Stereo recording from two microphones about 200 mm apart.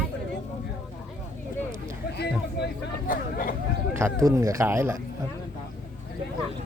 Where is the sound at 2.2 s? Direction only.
55° left (ahead or behind).